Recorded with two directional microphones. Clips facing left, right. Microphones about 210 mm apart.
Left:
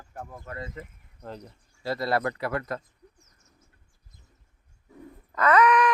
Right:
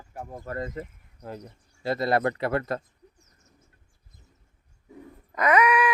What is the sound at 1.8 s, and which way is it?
Speech, 20° right (ahead or behind).